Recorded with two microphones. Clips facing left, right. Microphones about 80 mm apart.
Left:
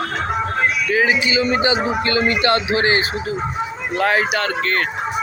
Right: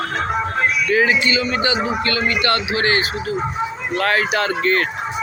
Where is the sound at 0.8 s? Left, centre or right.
Centre.